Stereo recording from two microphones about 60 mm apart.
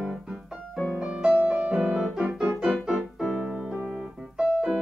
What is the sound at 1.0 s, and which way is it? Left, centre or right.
Music, centre.